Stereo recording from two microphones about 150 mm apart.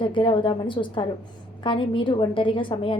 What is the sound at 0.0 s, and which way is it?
A woman's voice, 35° left (ahead or behind).